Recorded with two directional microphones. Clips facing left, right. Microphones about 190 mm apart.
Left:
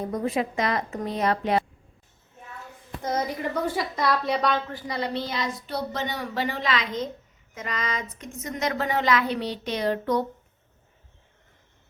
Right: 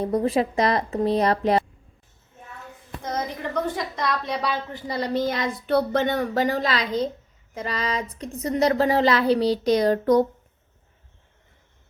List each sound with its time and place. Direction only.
0.0 s a woman's voice: 35° right (ahead or behind)
3.1 s a woman's voice: 5° left (ahead or behind)
4.7 s a woman's voice: 35° right (ahead or behind)